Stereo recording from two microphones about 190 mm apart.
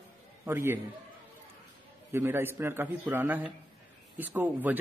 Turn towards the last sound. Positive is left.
turn(degrees=-10)  # may be behind; listen again after turning